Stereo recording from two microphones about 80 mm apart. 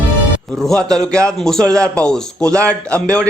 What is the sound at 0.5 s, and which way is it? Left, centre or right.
A man's voice, centre.